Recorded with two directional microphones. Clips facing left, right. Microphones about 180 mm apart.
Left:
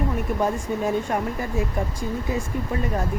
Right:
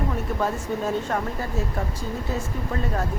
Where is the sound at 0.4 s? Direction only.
15° left (ahead or behind).